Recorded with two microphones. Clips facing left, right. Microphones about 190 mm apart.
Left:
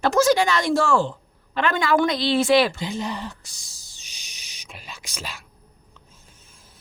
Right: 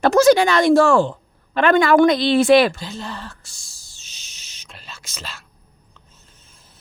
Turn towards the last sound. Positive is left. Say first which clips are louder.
# left 1 dB
turn(degrees=10)  # may be behind; listen again after turning